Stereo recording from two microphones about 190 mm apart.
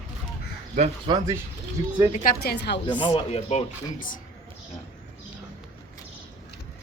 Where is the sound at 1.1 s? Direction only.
25° right (ahead or behind).